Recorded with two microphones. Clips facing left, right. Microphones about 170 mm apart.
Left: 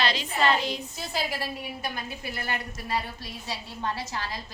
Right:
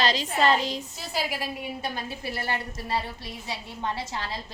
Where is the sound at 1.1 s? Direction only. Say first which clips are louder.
Right 1 dB; 15° right (ahead or behind).